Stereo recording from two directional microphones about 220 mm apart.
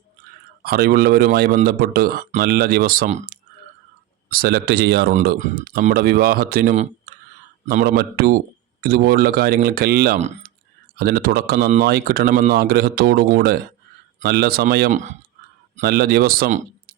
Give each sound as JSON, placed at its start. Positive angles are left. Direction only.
{"t": 0.6, "sound": "speech", "side_deg": -45}
{"t": 10.2, "sound": "speech", "side_deg": -30}
{"t": 10.9, "sound": "speech", "side_deg": -45}
{"t": 15.8, "sound": "speech", "side_deg": -45}